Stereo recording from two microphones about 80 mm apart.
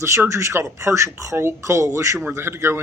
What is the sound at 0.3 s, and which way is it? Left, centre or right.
Speech, right.